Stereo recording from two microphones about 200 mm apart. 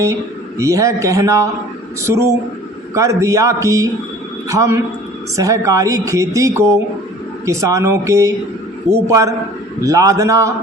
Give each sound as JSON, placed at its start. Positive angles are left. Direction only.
{"t": 0.6, "sound": "a man's voice", "side_deg": -15}